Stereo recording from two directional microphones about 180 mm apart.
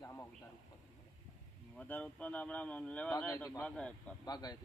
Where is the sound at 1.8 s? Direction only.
5° left (ahead or behind).